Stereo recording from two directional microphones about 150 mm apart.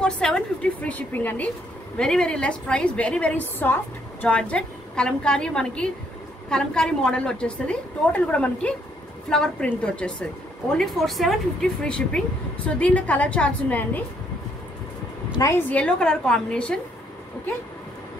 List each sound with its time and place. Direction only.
0.0 s a woman's voice: 5° left (ahead or behind)
15.3 s a woman's voice: 20° left (ahead or behind)
15.7 s a woman's voice: 5° left (ahead or behind)